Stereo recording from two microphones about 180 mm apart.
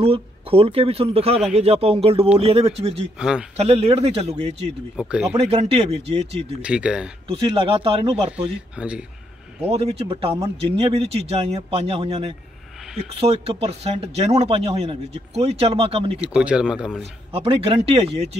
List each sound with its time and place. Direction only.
0.0 s speech: 30° right (ahead or behind)
3.2 s speech: 5° right (ahead or behind)
3.5 s speech: 35° right (ahead or behind)
4.9 s speech: 5° right (ahead or behind)
5.3 s speech: 35° right (ahead or behind)
6.6 s speech: 5° right (ahead or behind)
7.2 s speech: 25° right (ahead or behind)
8.5 s speech: 5° right (ahead or behind)
9.6 s speech: 35° right (ahead or behind)
16.2 s speech: 5° right (ahead or behind)
17.3 s speech: 30° right (ahead or behind)